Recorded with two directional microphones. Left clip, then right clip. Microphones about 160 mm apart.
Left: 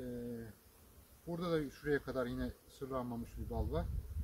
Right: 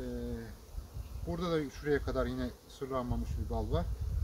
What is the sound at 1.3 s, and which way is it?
Speech, centre (ahead or behind).